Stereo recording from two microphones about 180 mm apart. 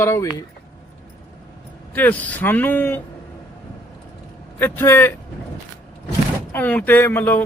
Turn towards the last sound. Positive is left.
turn(degrees=10)  # may be behind; listen again after turning